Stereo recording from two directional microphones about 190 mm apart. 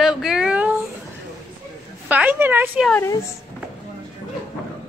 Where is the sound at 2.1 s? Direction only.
10° right (ahead or behind).